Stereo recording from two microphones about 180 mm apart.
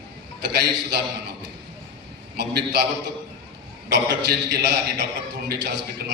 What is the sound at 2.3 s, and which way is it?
Speech, 65° right (ahead or behind).